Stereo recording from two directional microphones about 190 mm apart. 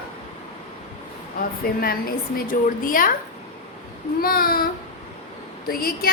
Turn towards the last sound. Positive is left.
turn(degrees=50)  # may be behind; listen again after turning